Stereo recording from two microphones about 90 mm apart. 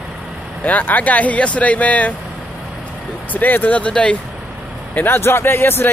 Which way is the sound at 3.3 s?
20° left (ahead or behind).